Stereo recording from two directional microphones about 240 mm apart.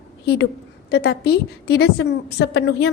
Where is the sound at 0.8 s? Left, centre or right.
Left.